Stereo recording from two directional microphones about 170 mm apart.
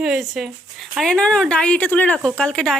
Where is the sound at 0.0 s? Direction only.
5° right (ahead or behind).